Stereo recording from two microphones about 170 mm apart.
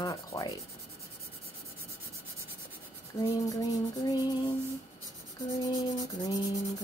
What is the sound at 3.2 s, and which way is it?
Speech, 20° left (ahead or behind).